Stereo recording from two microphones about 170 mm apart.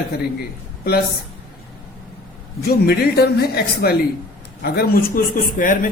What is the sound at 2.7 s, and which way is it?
Speech, 70° left (ahead or behind).